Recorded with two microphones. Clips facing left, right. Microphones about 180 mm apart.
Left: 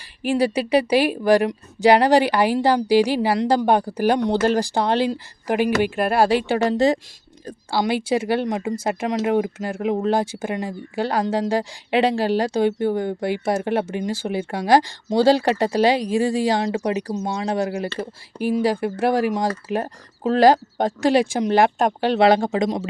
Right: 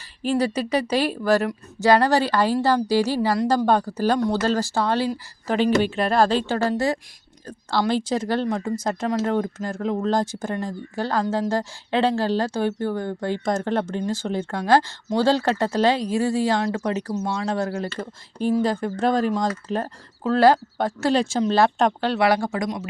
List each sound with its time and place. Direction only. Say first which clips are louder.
0.2 s speech: left 2 dB; 10° left (ahead or behind)